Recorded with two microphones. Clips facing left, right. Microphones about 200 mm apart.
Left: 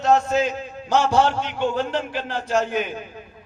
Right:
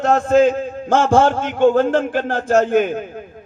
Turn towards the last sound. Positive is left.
turn(degrees=-50)  # may be behind; listen again after turning